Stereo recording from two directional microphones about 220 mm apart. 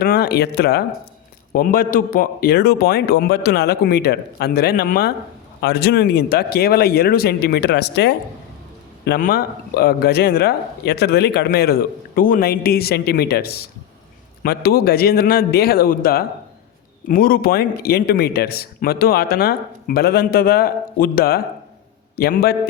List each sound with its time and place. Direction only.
0.0 s speech: 45° left (ahead or behind)